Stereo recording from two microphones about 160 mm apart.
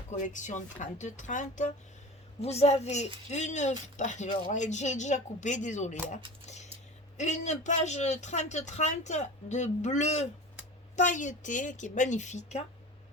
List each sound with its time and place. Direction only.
0.1 s a woman's voice: 50° left (ahead or behind)
7.2 s a woman's voice: 45° left (ahead or behind)